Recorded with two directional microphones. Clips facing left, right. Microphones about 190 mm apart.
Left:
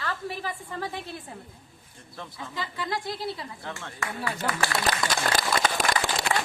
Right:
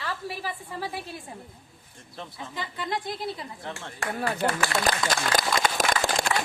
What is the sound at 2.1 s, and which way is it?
Speech, 20° right (ahead or behind).